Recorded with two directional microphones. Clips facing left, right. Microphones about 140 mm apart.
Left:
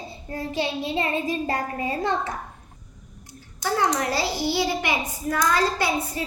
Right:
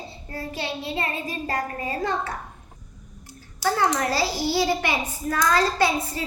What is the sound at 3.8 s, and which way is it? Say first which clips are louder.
A child's voice: even; 20° left (ahead or behind).